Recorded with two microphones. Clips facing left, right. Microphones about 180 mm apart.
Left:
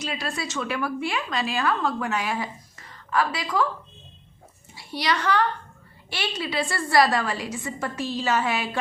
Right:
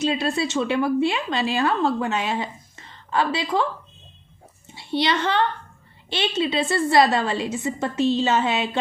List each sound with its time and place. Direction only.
0.0 s a woman's voice: 25° right (ahead or behind)
4.7 s a woman's voice: 25° right (ahead or behind)